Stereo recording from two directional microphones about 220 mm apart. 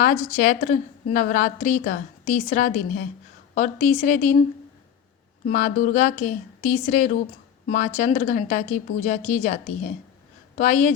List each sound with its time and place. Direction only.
0.3 s a woman's voice: 35° left (ahead or behind)
5.5 s a woman's voice: 35° left (ahead or behind)